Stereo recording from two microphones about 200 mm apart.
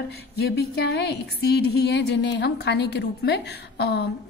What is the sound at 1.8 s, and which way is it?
A woman's voice, 60° left (ahead or behind).